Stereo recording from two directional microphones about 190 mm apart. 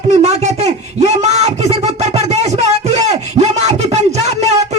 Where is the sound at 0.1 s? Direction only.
35° right (ahead or behind).